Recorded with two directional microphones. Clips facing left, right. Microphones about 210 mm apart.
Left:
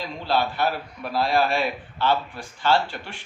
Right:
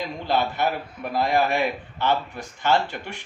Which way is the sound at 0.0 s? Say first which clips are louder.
Even; 20° right (ahead or behind).